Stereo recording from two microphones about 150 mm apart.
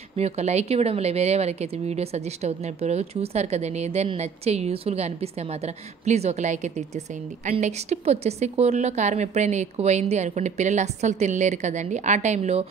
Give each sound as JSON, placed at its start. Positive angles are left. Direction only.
{"t": 0.1, "sound": "speech", "side_deg": -45}